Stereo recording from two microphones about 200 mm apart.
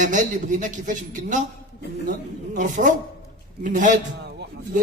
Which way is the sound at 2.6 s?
40° right (ahead or behind).